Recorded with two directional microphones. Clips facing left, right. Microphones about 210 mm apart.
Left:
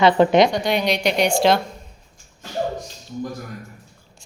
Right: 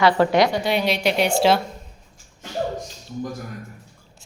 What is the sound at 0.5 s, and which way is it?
A woman's voice, 5° right (ahead or behind).